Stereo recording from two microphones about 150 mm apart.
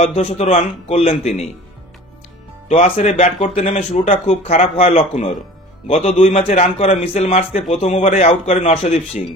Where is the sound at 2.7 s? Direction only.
45° left (ahead or behind).